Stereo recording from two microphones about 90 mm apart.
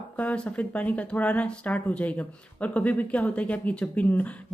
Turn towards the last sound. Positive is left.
turn(degrees=15)  # may be behind; listen again after turning